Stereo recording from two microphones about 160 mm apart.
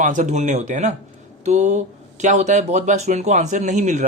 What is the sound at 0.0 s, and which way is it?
Speech, 50° right (ahead or behind).